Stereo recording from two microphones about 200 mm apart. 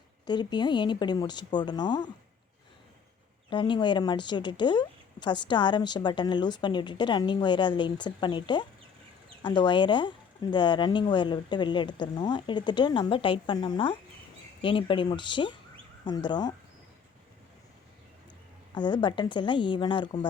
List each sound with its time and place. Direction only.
0.3 s a woman's voice: 20° left (ahead or behind)
3.5 s a woman's voice: 25° left (ahead or behind)
18.7 s a woman's voice: 20° left (ahead or behind)